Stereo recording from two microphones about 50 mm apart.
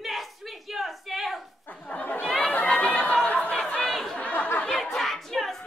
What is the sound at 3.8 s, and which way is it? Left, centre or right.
Chatter, centre.